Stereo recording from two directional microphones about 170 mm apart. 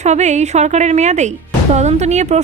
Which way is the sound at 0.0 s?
40° right (ahead or behind).